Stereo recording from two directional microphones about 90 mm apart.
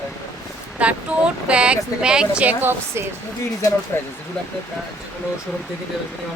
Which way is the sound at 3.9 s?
30° left (ahead or behind).